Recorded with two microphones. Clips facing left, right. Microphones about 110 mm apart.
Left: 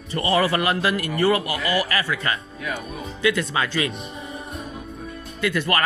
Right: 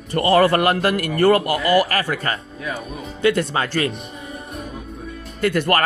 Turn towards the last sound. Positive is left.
turn(degrees=-50)  # may be behind; listen again after turning